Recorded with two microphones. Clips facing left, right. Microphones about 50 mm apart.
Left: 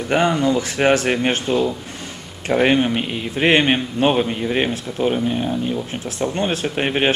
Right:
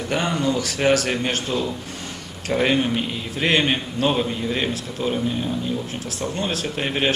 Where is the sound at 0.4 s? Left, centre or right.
Left.